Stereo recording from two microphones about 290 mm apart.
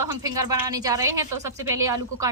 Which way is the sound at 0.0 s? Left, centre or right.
Centre.